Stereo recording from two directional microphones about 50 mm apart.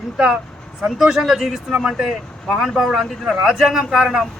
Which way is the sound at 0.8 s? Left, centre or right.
Centre.